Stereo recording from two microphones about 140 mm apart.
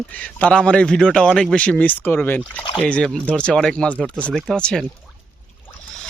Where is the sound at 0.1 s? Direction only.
10° left (ahead or behind).